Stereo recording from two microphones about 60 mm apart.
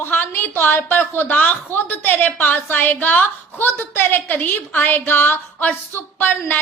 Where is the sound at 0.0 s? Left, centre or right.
Left.